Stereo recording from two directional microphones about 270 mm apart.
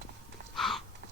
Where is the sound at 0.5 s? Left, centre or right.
Centre.